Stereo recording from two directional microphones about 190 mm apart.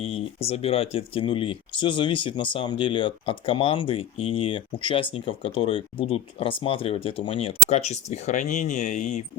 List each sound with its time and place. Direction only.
0.0 s speech: 30° left (ahead or behind)